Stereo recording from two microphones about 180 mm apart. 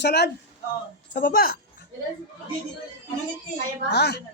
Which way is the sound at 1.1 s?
55° left (ahead or behind).